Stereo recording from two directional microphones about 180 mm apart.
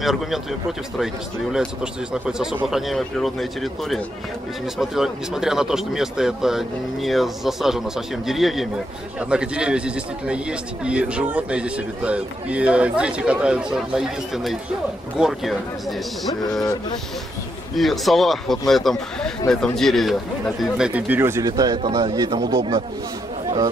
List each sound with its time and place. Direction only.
0.0 s a man's voice: centre (ahead or behind)
17.7 s a man's voice: centre (ahead or behind); by 22.4 s 25° right (ahead or behind)